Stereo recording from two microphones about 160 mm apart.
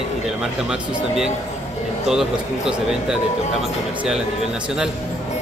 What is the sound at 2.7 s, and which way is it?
Speech, 5° right (ahead or behind).